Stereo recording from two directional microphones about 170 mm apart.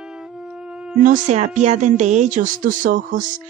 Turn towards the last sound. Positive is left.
turn(degrees=-50)  # may be behind; listen again after turning